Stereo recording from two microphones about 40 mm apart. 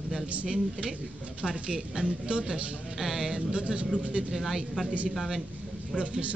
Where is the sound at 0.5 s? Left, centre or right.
Centre.